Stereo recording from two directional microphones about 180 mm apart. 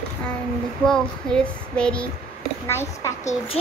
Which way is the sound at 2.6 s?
15° left (ahead or behind).